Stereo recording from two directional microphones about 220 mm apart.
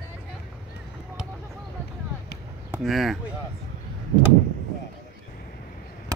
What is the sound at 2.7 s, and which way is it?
Speech, centre (ahead or behind).